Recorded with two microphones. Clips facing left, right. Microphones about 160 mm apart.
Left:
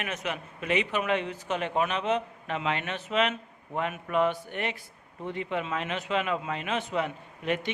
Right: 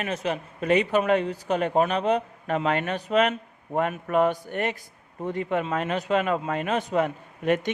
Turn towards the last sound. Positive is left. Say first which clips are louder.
# right 6 dB
turn(degrees=-45)  # may be behind; listen again after turning